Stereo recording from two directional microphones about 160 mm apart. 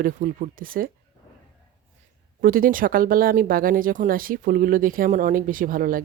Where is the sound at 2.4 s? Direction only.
60° right (ahead or behind).